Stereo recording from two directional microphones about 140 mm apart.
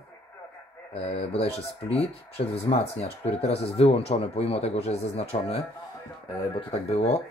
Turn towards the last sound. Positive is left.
turn(degrees=45)  # may be behind; listen again after turning